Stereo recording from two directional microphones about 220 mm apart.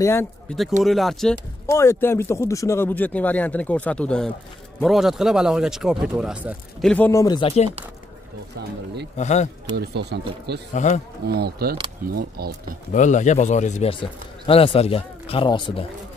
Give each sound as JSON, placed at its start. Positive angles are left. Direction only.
{"t": 0.0, "sound": "speech", "side_deg": 10}
{"t": 0.8, "sound": "speech", "side_deg": 0}
{"t": 1.7, "sound": "speech", "side_deg": 10}
{"t": 6.9, "sound": "speech", "side_deg": 10}
{"t": 9.1, "sound": "speech", "side_deg": 30}
{"t": 9.8, "sound": "speech", "side_deg": -50}
{"t": 10.7, "sound": "speech", "side_deg": 35}
{"t": 11.2, "sound": "speech", "side_deg": -45}
{"t": 12.9, "sound": "speech", "side_deg": 35}